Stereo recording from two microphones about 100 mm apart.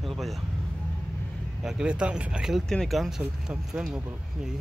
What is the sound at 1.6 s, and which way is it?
Speech, 10° right (ahead or behind).